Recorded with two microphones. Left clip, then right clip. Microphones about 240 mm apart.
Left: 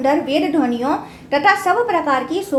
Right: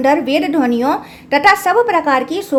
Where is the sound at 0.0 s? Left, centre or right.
Right.